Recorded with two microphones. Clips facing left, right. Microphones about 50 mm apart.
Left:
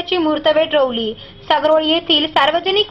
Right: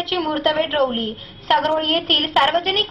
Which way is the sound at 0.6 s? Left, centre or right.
Left.